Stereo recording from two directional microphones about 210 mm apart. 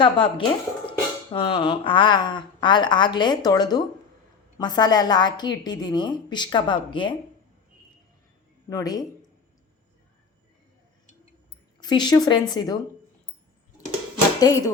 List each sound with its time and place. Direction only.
0.0 s speech: 25° left (ahead or behind)
8.7 s speech: 20° left (ahead or behind)
11.8 s speech: 20° left (ahead or behind)
14.3 s speech: 15° left (ahead or behind)